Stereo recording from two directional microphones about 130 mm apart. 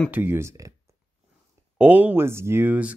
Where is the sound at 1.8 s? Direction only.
15° right (ahead or behind).